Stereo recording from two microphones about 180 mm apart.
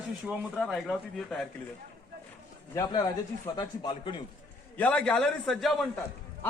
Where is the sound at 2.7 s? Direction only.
20° left (ahead or behind).